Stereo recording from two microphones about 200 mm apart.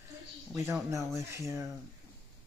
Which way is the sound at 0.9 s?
15° right (ahead or behind).